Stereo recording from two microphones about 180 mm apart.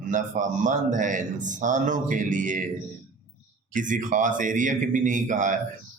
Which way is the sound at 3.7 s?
45° right (ahead or behind).